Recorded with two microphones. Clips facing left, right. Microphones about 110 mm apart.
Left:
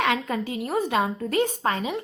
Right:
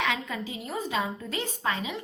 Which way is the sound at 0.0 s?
50° left (ahead or behind).